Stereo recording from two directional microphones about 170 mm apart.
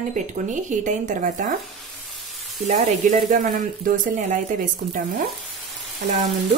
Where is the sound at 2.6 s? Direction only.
45° right (ahead or behind).